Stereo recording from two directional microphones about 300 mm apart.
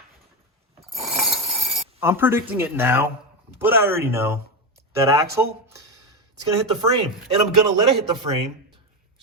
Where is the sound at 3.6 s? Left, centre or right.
Centre.